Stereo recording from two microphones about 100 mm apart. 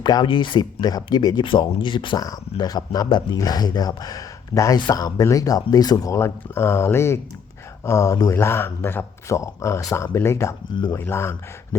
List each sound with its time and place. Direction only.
0.0 s speech: 50° left (ahead or behind)
2.2 s speech: 40° left (ahead or behind); by 11.8 s 25° left (ahead or behind)